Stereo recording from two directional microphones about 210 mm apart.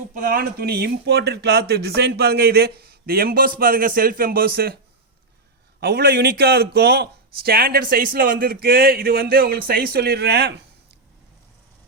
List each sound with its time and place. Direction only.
0.1 s speech: 40° right (ahead or behind)
5.8 s speech: 50° right (ahead or behind)